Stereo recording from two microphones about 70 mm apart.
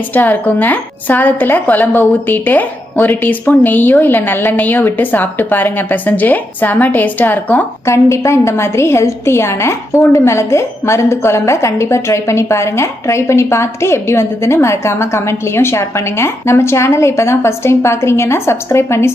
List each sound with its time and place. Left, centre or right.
0.1 s a woman's voice: left
7.9 s a woman's voice: left